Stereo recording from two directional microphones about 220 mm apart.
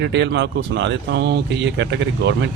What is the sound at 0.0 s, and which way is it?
Speech, 55° right (ahead or behind).